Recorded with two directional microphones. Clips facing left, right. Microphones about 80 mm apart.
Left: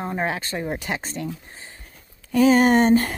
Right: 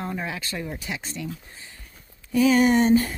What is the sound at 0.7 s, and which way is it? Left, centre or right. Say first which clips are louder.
Speech: left 6 dB; left.